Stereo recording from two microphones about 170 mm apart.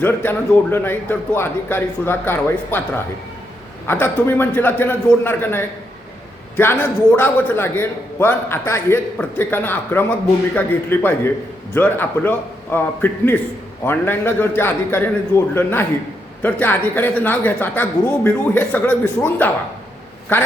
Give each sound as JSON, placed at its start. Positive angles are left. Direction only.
{"t": 0.0, "sound": "a man's voice", "side_deg": 10}